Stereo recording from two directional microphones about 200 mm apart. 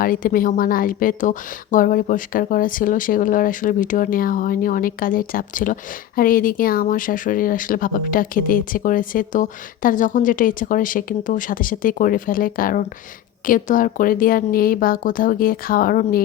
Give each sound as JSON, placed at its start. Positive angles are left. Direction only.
{"t": 0.0, "sound": "a woman's voice", "side_deg": 45}